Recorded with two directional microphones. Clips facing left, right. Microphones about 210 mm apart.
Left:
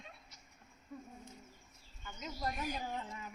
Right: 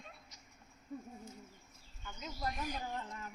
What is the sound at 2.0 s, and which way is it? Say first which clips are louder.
Speech: left 1 dB; centre (ahead or behind).